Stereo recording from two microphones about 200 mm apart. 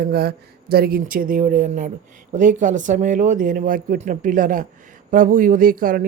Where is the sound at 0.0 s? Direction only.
50° right (ahead or behind).